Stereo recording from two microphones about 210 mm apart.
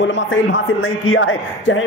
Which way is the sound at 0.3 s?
65° left (ahead or behind).